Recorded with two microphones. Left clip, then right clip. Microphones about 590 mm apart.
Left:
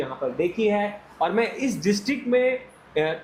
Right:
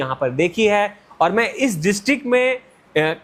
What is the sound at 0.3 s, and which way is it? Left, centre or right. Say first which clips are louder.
A man's voice: right 6 dB; right.